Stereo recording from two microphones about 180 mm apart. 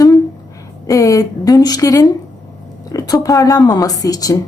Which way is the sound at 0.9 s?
20° left (ahead or behind).